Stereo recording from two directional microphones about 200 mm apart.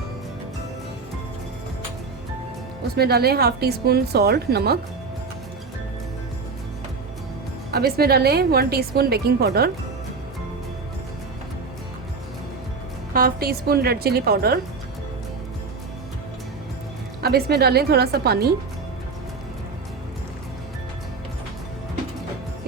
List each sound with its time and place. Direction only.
2.9 s a woman's voice: 50° right (ahead or behind)
7.7 s a woman's voice: 50° right (ahead or behind)
13.1 s a woman's voice: 45° right (ahead or behind)
17.2 s a woman's voice: 50° right (ahead or behind)